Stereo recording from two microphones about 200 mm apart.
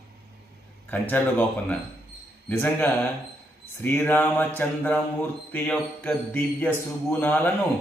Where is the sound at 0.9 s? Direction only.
10° left (ahead or behind).